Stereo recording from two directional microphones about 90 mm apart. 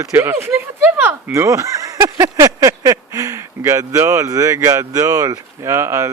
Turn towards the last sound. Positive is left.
turn(degrees=-30)  # may be behind; listen again after turning